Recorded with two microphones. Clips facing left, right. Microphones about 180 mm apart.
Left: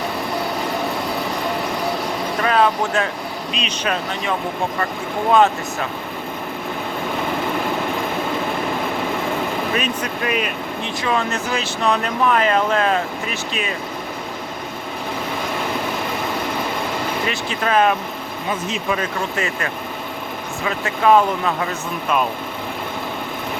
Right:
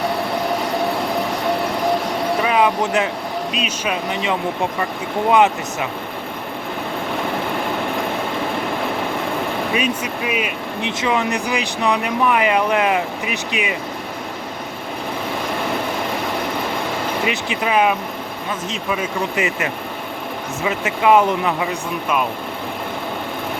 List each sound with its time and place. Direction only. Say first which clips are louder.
2.4 s vehicle: left 1 dB; 15° right (ahead or behind)
3.5 s speech: right 1 dB; 5° right (ahead or behind)
4.1 s speech: right 2 dB; 20° right (ahead or behind)
9.7 s speech: right 1 dB; 10° right (ahead or behind)
10.8 s speech: right 2 dB; 20° right (ahead or behind)
17.2 s speech: right 1 dB; 15° right (ahead or behind)
19.4 s speech: right 2 dB; 20° right (ahead or behind)